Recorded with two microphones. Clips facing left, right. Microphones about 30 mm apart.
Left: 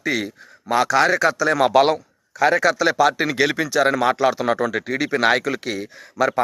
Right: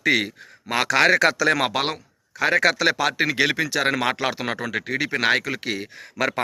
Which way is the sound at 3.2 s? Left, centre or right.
Right.